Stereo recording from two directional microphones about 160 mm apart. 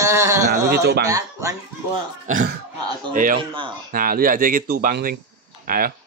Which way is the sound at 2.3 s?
55° right (ahead or behind).